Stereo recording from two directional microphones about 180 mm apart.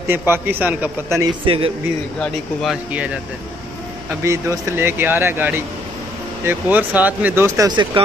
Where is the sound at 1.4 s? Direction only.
30° right (ahead or behind).